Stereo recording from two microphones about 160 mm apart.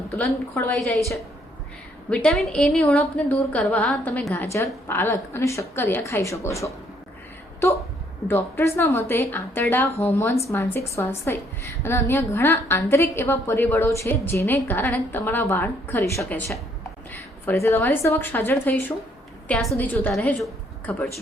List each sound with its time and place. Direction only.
0.2 s a woman's voice: 10° left (ahead or behind)
8.3 s a woman's voice: 15° left (ahead or behind)